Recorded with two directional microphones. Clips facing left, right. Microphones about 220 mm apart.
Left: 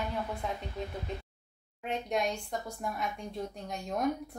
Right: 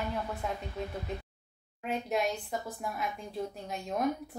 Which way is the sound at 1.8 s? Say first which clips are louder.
Right 1 dB; 5° right (ahead or behind).